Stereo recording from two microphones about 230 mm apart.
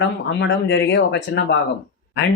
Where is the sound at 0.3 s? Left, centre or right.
Left.